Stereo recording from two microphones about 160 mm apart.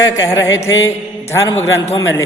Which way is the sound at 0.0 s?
20° left (ahead or behind).